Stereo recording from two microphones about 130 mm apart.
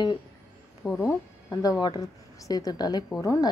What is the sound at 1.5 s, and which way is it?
A woman's voice, 30° left (ahead or behind).